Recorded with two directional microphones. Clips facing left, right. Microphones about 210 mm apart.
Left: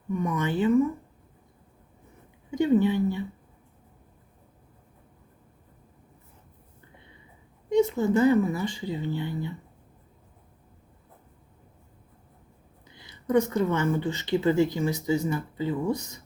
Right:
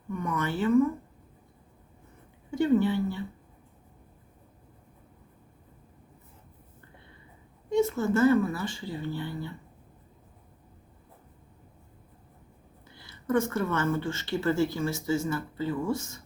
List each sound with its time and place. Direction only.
0.1 s speech: 15° left (ahead or behind)
2.5 s speech: 15° left (ahead or behind)
7.7 s speech: 20° left (ahead or behind)
12.8 s speech: 20° left (ahead or behind)